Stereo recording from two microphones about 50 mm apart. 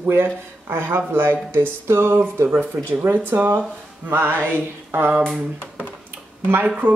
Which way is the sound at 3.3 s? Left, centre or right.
Right.